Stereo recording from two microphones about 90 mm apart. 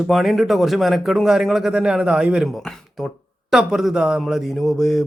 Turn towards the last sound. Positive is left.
turn(degrees=0)  # may be behind; listen again after turning